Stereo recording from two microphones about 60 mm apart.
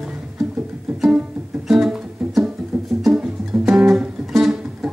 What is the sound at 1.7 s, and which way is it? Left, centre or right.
Music, centre.